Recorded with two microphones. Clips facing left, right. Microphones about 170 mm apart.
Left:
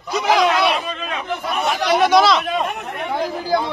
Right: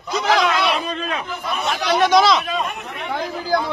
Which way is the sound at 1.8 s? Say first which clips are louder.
Left 1 dB; 10° left (ahead or behind).